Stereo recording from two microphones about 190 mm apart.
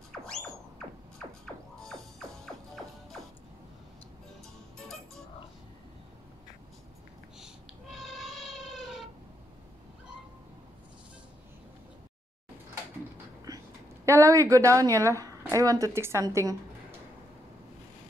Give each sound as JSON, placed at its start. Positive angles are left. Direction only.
{"t": 1.4, "sound": "music", "side_deg": 0}
{"t": 4.7, "sound": "music", "side_deg": 0}
{"t": 7.3, "sound": "cat", "side_deg": 0}
{"t": 13.5, "sound": "a sound", "side_deg": -20}
{"t": 14.0, "sound": "a woman's voice", "side_deg": -15}